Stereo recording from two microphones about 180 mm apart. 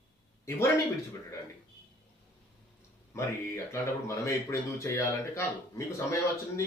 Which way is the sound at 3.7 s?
15° left (ahead or behind).